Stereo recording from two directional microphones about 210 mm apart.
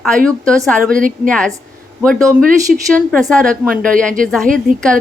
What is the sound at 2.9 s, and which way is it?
Speech, 5° left (ahead or behind).